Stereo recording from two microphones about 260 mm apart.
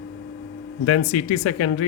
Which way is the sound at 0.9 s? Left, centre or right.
Left.